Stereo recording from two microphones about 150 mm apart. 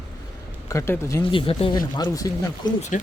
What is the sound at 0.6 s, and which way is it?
Speech, 20° left (ahead or behind).